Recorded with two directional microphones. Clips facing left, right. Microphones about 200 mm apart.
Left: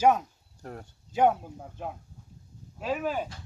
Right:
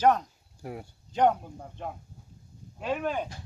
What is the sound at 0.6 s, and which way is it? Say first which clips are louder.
Speech: right 3 dB; 10° right (ahead or behind).